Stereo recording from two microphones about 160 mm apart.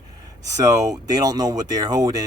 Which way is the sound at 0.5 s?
20° right (ahead or behind).